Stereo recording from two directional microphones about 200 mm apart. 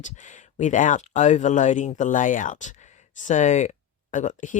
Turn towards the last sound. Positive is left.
turn(degrees=40)  # may be behind; listen again after turning